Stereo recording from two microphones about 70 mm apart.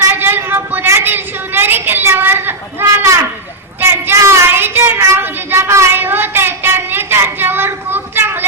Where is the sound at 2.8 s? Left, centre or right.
Right.